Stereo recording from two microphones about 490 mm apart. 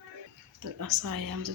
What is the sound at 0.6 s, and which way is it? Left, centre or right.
Speech, right.